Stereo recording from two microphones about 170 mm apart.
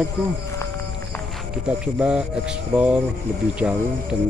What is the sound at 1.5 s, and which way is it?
Speech, 5° right (ahead or behind).